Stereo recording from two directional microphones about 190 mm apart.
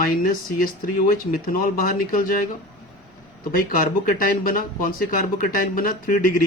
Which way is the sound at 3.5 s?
50° left (ahead or behind).